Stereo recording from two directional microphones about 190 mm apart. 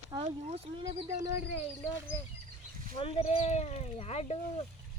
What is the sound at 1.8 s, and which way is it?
Speech, 10° left (ahead or behind).